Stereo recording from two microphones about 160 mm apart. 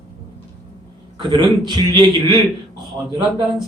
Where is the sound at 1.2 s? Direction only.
30° right (ahead or behind).